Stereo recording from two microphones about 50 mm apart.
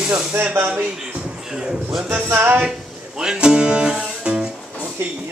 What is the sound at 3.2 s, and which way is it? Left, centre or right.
Music, centre.